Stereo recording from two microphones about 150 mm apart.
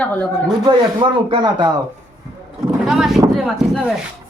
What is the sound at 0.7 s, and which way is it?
Speech, 35° right (ahead or behind).